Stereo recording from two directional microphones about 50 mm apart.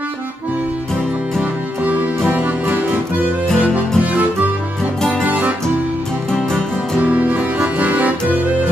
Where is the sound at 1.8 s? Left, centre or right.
Right.